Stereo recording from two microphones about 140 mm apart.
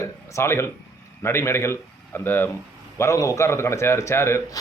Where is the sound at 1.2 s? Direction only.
20° left (ahead or behind).